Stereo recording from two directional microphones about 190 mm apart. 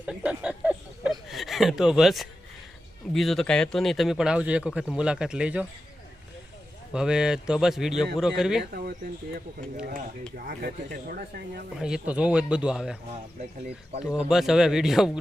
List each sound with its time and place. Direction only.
0.0 s a sound: 5° right (ahead or behind)
1.3 s speech: centre (ahead or behind)
6.9 s speech: 5° right (ahead or behind)
8.7 s speech: 50° right (ahead or behind)
11.8 s speech: 5° right (ahead or behind)
14.1 s speech: centre (ahead or behind)